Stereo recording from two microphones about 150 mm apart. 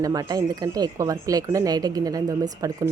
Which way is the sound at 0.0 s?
25° right (ahead or behind).